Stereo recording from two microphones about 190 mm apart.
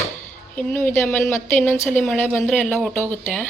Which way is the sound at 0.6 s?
10° left (ahead or behind).